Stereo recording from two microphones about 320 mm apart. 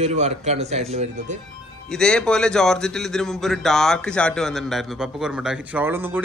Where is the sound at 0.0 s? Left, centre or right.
Centre.